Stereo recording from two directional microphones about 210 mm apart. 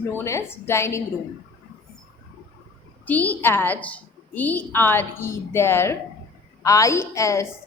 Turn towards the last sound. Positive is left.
turn(degrees=15)  # may be behind; listen again after turning